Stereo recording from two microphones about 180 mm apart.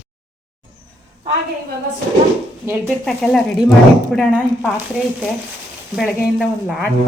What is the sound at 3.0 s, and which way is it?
Speech, centre (ahead or behind).